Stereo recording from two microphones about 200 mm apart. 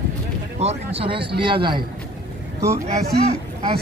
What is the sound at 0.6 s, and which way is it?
Speech, 30° right (ahead or behind).